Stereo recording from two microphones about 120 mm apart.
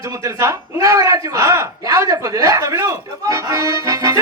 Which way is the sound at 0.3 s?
25° right (ahead or behind).